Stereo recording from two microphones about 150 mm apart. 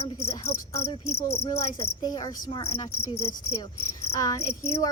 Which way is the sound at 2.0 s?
25° left (ahead or behind).